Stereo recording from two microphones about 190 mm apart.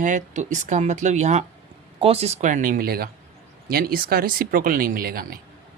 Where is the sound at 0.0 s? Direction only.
40° right (ahead or behind).